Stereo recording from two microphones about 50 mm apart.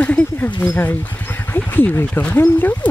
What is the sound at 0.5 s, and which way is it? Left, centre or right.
Speech, left.